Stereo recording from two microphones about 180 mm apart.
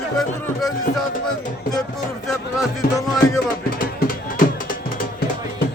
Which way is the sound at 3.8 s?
50° left (ahead or behind).